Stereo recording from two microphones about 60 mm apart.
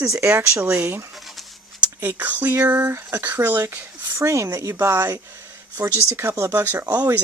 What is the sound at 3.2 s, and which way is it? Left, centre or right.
Speech, right.